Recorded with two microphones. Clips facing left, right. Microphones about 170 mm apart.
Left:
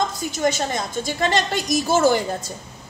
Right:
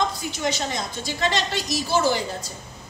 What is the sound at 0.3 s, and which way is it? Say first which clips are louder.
A woman's voice: left 5 dB; 50° left (ahead or behind).